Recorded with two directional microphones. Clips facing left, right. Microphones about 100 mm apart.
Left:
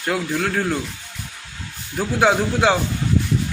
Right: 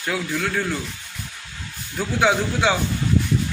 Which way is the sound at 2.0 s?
45° left (ahead or behind).